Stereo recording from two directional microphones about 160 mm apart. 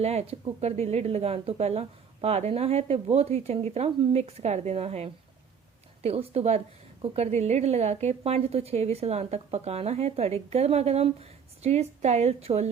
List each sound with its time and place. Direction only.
0.0 s a woman's voice: 40° right (ahead or behind)